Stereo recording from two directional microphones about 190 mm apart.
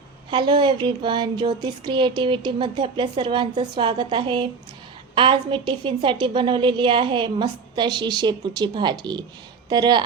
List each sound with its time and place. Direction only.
0.3 s speech: 25° right (ahead or behind)